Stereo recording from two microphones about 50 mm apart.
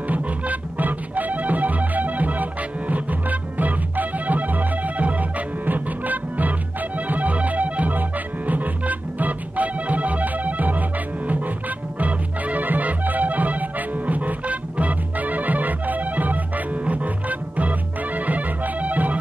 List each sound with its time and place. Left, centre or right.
0.1 s music: right
12.0 s music: right